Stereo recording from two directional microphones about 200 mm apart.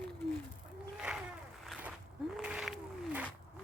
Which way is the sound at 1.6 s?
Centre (ahead or behind).